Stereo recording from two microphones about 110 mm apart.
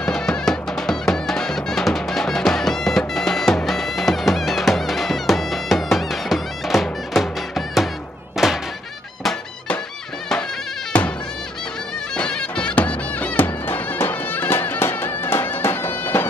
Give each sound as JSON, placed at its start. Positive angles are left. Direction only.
{"t": 0.0, "sound": "music", "side_deg": 5}
{"t": 8.4, "sound": "a sound", "side_deg": -5}
{"t": 12.2, "sound": "music", "side_deg": 10}